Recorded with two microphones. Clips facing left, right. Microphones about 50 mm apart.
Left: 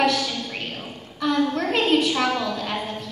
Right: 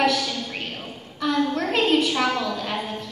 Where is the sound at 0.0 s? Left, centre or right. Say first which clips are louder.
Even; centre.